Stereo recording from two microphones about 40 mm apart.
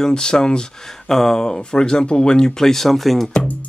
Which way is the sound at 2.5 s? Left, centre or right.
Centre.